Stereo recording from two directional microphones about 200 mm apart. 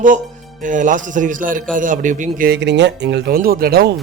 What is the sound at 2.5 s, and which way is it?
Speech, 60° right (ahead or behind).